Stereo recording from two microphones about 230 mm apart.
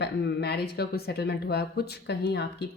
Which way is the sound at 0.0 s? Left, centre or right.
Left.